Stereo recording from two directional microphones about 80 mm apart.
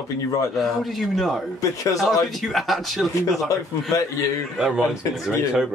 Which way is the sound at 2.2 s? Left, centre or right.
Centre.